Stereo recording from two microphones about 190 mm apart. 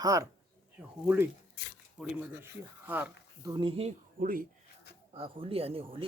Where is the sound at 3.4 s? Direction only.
20° right (ahead or behind).